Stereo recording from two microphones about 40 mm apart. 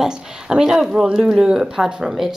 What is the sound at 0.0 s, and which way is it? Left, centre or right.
Speech, centre.